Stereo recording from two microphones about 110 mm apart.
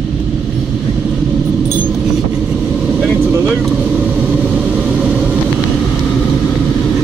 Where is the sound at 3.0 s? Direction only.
5° right (ahead or behind).